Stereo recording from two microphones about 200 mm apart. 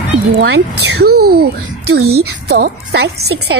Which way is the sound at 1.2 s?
50° right (ahead or behind).